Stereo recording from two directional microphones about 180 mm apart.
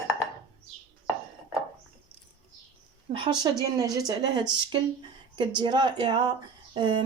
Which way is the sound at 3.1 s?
25° right (ahead or behind).